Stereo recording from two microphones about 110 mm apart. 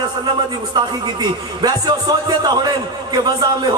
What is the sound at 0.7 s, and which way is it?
Speech, 40° right (ahead or behind).